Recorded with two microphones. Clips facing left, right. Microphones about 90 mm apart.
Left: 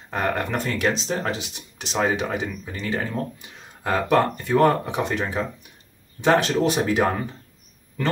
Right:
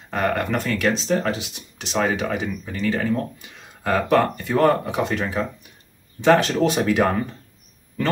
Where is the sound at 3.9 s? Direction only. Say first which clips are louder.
Right 1 dB; 15° left (ahead or behind).